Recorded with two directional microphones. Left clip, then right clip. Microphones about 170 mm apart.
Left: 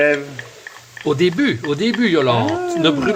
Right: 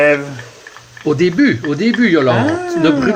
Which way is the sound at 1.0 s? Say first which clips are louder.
Right 3 dB; 40° left (ahead or behind).